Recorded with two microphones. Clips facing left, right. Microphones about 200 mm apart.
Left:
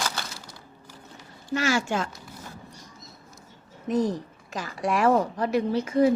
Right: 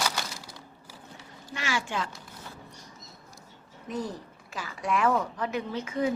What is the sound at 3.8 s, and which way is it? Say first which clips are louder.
Speech: left 9 dB; 40° left (ahead or behind).